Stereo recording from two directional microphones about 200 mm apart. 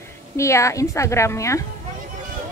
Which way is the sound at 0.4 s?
15° left (ahead or behind).